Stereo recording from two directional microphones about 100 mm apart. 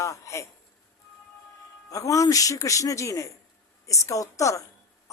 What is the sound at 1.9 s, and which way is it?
Speech, 35° left (ahead or behind).